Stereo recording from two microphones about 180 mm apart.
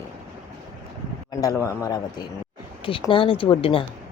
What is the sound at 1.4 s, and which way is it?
Speech, 15° left (ahead or behind).